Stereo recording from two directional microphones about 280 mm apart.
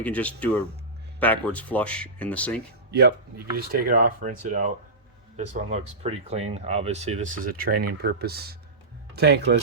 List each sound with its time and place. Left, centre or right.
0.0 s speech: centre
2.9 s speech: right